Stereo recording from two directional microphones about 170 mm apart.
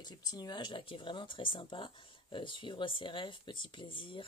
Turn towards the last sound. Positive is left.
turn(degrees=30)  # may be behind; listen again after turning